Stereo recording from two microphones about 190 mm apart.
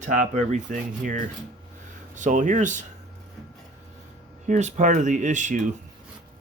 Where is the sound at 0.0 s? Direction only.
40° right (ahead or behind).